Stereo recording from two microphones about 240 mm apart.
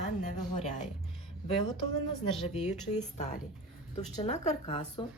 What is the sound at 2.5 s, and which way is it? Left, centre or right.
A woman's voice, left.